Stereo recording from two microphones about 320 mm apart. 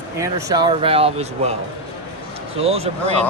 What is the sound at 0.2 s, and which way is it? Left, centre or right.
Speech, centre.